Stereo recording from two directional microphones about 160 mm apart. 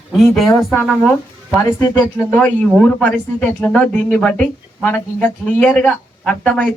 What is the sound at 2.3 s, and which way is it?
Speech, 5° left (ahead or behind).